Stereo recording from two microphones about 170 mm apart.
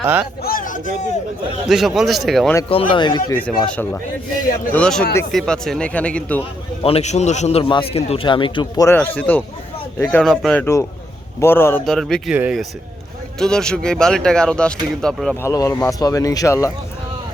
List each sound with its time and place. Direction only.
0.0 s a man's voice: 10° right (ahead or behind)
0.4 s a sound: 55° left (ahead or behind)
1.6 s speech: 5° right (ahead or behind)
2.6 s speech: 30° left (ahead or behind)
3.3 s speech: 10° left (ahead or behind)
6.8 s a man's voice: 40° left (ahead or behind); by 9.0 s 20° left (ahead or behind)
9.0 s speech: 10° left (ahead or behind)
11.3 s speech: 15° left (ahead or behind)
11.9 s speech: centre (ahead or behind)
13.4 s speech: 5° left (ahead or behind)
15.4 s speech: 20° left (ahead or behind)